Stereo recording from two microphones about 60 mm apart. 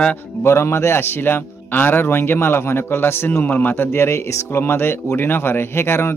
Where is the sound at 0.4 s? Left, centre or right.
Left.